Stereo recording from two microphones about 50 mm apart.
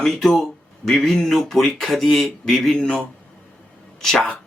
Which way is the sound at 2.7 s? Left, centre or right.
Left.